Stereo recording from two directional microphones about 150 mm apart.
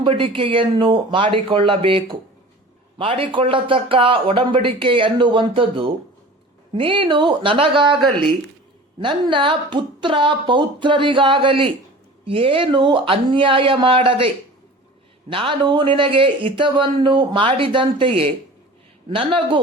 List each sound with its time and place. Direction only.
0.0 s a man's voice: 35° right (ahead or behind)
15.3 s a man's voice: 35° right (ahead or behind)